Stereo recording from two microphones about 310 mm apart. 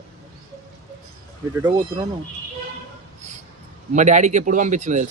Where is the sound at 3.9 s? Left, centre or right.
Right.